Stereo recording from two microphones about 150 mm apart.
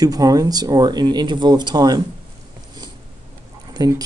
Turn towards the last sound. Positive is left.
turn(degrees=-25)  # may be behind; listen again after turning